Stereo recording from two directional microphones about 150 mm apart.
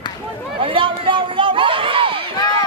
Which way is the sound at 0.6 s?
35° right (ahead or behind).